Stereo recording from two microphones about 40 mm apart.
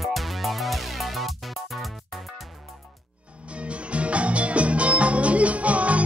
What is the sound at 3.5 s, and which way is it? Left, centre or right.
Music, right.